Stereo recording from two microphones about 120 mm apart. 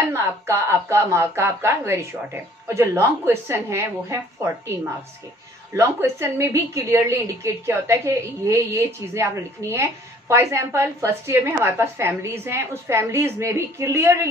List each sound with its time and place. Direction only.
0.1 s a woman's voice: 20° right (ahead or behind)
5.8 s a woman's voice: 20° right (ahead or behind)